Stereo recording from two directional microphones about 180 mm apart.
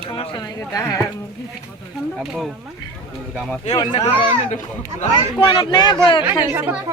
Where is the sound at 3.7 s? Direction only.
25° left (ahead or behind).